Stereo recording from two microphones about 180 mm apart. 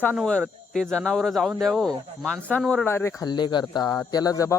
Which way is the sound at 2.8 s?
15° left (ahead or behind).